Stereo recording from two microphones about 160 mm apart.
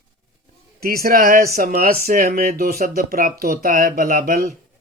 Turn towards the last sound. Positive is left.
turn(degrees=-65)  # may be behind; listen again after turning